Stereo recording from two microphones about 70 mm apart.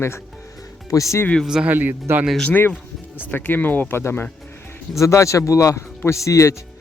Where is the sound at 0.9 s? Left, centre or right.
Left.